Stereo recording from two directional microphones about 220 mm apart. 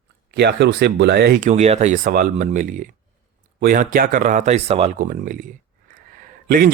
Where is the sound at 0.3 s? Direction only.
50° right (ahead or behind).